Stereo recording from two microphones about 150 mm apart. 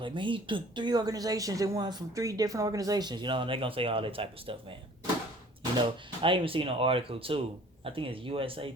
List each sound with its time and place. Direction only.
0.0 s a woman's voice: 35° right (ahead or behind)
5.7 s speech: 30° right (ahead or behind)